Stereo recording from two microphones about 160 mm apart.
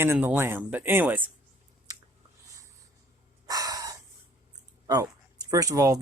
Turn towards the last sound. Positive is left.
turn(degrees=-20)  # may be behind; listen again after turning